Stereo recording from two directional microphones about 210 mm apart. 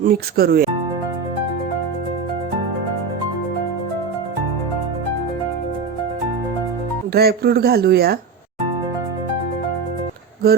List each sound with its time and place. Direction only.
0.0 s speech: 45° right (ahead or behind)
7.1 s speech: 50° right (ahead or behind)